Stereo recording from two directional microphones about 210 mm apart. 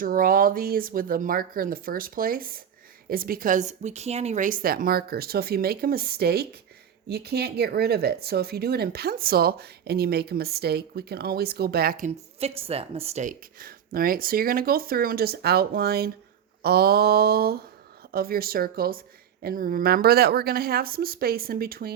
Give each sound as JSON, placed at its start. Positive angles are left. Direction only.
{"t": 0.0, "sound": "speech", "side_deg": -40}
{"t": 12.4, "sound": "speech", "side_deg": -30}